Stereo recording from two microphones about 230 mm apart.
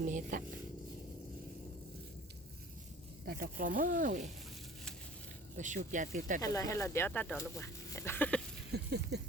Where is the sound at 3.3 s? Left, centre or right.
Right.